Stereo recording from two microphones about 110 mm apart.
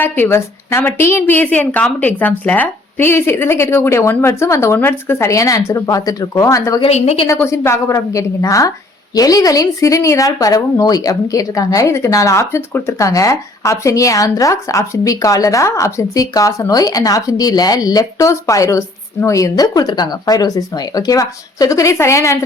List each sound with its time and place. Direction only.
0.0 s a woman's voice: 20° left (ahead or behind)
6.8 s a woman's voice: 70° left (ahead or behind)
7.3 s a woman's voice: 25° left (ahead or behind)